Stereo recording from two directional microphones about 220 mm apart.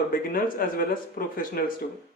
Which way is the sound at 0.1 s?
40° left (ahead or behind).